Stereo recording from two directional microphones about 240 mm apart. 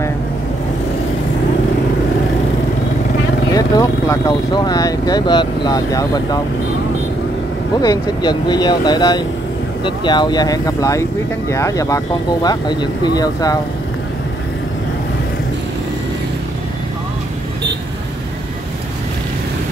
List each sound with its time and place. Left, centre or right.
3.5 s speech: centre
7.8 s speech: centre